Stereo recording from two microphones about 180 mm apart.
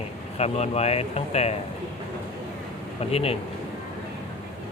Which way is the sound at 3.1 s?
35° left (ahead or behind).